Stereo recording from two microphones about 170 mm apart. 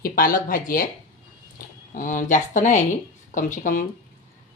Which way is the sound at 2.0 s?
50° left (ahead or behind).